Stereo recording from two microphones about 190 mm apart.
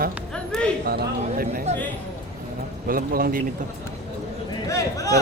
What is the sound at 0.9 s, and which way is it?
Speech, 55° right (ahead or behind).